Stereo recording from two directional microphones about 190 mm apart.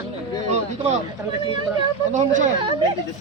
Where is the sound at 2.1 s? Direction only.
40° right (ahead or behind).